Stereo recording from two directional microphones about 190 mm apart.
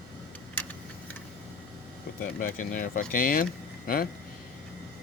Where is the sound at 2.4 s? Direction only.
45° left (ahead or behind).